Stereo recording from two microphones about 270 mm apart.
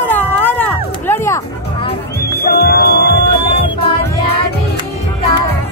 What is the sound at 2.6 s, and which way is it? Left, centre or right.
Music, left.